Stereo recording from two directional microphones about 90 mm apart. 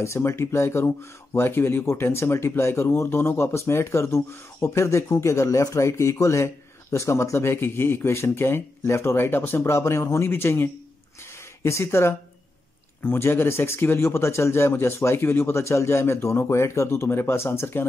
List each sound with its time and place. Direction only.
0.0 s speech: 30° left (ahead or behind)